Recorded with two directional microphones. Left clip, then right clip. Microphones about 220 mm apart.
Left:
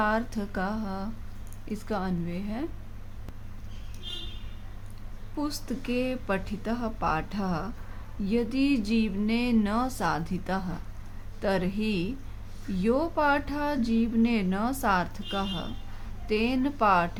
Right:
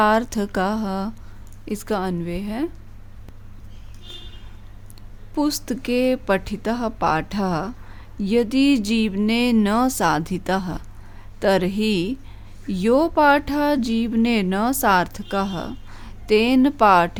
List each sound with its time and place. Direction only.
0.0 s speech: 50° right (ahead or behind)
5.3 s speech: 50° right (ahead or behind)